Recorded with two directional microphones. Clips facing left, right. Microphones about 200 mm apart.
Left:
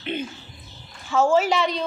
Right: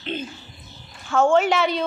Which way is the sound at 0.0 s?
10° left (ahead or behind).